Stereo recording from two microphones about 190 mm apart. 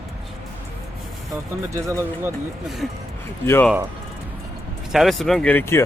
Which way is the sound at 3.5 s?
10° left (ahead or behind).